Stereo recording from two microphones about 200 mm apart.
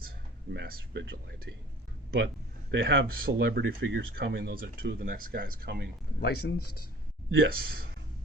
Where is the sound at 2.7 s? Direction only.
65° right (ahead or behind).